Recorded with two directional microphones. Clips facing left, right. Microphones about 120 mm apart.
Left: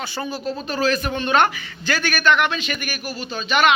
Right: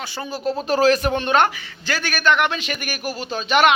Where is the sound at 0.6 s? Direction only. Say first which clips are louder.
Right 5 dB; 80° right.